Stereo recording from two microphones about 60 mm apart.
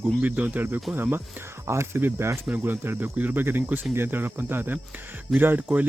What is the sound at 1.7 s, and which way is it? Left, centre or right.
Speech, right.